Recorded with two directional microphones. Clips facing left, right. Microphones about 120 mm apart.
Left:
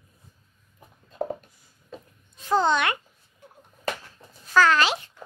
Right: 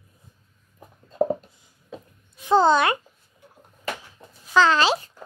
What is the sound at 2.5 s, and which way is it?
Speech, 35° right (ahead or behind).